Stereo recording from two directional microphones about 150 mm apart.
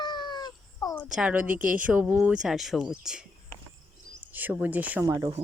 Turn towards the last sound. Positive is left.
turn(degrees=-25)  # may be behind; listen again after turning